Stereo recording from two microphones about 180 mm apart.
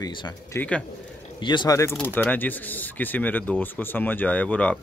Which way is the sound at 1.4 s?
25° left (ahead or behind).